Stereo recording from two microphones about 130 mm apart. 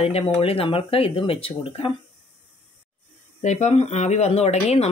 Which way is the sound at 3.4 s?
65° left (ahead or behind).